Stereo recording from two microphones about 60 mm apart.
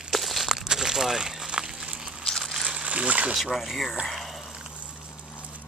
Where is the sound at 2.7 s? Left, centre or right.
Centre.